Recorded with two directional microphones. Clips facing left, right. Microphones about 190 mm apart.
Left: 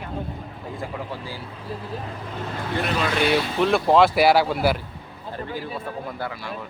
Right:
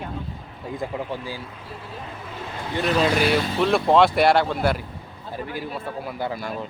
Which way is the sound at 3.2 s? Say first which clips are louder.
Even; centre (ahead or behind).